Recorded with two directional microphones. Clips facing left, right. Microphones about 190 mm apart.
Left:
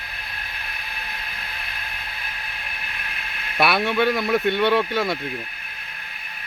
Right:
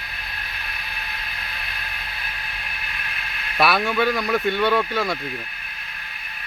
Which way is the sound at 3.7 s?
Centre (ahead or behind).